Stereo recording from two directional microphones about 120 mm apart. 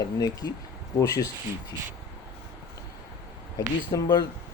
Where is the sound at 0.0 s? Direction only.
30° left (ahead or behind).